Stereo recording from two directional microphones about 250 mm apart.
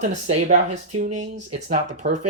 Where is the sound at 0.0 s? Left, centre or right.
Right.